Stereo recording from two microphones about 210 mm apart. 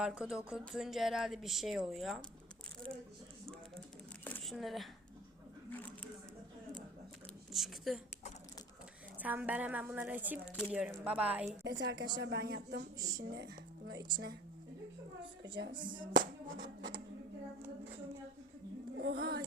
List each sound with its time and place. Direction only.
0.0 s speech: 5° right (ahead or behind)
4.2 s a sound: 5° left (ahead or behind)
7.5 s speech: centre (ahead or behind)
9.1 s a woman's voice: 10° right (ahead or behind)
11.6 s speech: 55° right (ahead or behind)
13.0 s a woman's voice: 15° right (ahead or behind)
13.3 s speech: 55° right (ahead or behind)
15.5 s speech: 60° right (ahead or behind)
15.8 s music: 20° right (ahead or behind)
16.1 s music: 50° right (ahead or behind)
18.9 s music: 50° right (ahead or behind)